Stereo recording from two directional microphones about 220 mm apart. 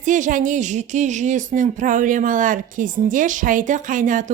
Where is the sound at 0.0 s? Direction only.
35° right (ahead or behind).